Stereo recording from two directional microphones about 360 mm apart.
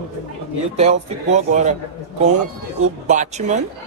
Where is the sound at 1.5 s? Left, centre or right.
Centre.